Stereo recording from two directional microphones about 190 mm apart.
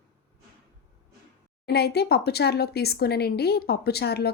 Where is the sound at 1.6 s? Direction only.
60° left (ahead or behind).